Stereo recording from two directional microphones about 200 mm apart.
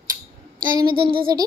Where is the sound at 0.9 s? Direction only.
45° right (ahead or behind).